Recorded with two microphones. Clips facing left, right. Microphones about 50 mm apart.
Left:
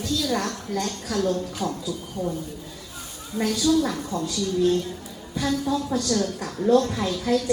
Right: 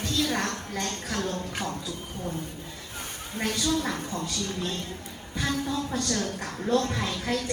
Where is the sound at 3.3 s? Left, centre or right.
Right.